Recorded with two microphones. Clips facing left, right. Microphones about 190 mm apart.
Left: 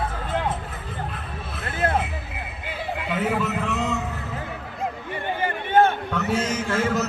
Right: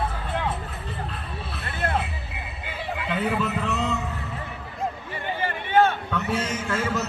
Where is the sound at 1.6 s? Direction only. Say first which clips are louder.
Left 4 dB; 45° left (ahead or behind).